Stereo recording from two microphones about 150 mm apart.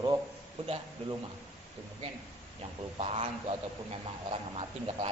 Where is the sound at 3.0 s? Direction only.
40° right (ahead or behind).